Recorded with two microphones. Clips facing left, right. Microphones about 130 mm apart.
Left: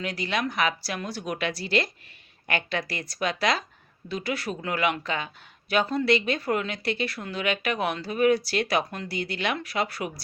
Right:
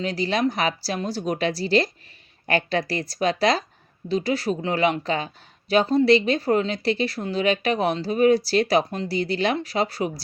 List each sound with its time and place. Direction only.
0.0 s speech: 30° right (ahead or behind)